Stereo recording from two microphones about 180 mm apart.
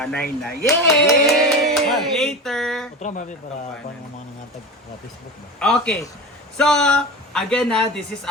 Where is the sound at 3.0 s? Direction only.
40° left (ahead or behind).